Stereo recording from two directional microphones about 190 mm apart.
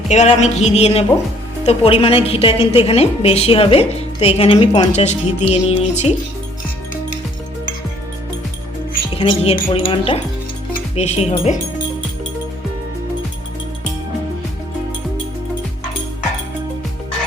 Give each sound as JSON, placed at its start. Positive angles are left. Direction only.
{"t": 0.1, "sound": "a woman's voice", "side_deg": 35}
{"t": 9.1, "sound": "a woman's voice", "side_deg": 30}